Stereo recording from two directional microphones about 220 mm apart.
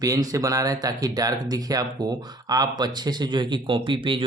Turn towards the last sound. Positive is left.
turn(degrees=-20)  # may be behind; listen again after turning